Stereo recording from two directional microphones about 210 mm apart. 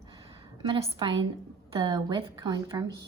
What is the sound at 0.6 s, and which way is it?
Speech, 25° right (ahead or behind).